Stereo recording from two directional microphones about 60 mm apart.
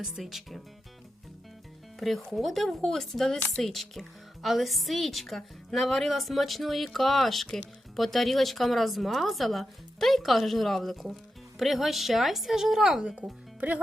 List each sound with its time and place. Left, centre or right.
0.0 s a woman's voice: centre
2.0 s a woman's voice: centre
13.6 s speech: right